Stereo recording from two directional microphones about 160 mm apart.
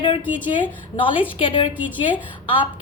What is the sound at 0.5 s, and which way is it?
A woman's voice, 30° left (ahead or behind).